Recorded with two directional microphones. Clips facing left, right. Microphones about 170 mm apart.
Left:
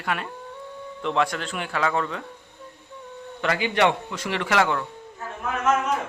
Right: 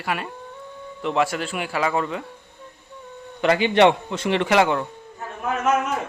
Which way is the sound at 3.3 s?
20° right (ahead or behind).